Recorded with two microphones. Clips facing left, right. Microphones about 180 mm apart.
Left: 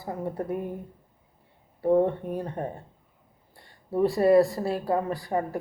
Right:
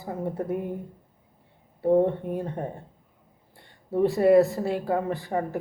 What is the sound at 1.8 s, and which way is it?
Speech, 20° right (ahead or behind).